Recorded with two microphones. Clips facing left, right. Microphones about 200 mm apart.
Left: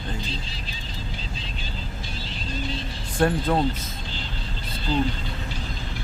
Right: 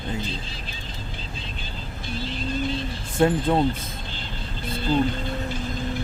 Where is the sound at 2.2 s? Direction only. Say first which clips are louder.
Right 5 dB; 50° right (ahead or behind).